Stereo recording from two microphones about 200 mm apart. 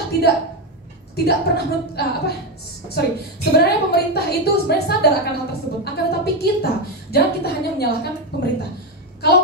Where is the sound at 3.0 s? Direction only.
55° left (ahead or behind).